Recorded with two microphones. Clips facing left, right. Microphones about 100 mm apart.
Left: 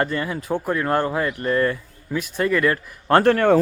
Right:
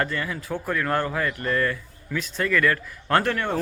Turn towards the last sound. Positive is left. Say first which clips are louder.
# left 6 dB
turn(degrees=30)  # may be behind; listen again after turning